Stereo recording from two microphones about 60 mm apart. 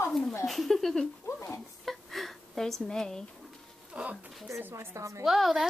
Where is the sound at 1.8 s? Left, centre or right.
Centre.